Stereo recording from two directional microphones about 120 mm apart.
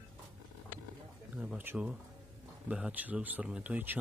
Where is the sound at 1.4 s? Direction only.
10° right (ahead or behind).